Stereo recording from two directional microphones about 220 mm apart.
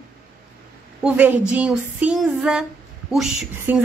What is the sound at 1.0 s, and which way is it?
Speech, 5° right (ahead or behind).